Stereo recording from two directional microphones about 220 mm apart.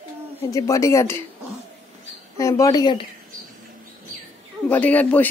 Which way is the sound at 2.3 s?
15° left (ahead or behind).